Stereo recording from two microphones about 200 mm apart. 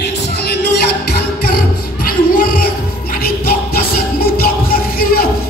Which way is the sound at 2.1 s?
45° left (ahead or behind).